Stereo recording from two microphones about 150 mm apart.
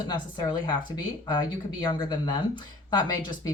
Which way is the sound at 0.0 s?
30° left (ahead or behind).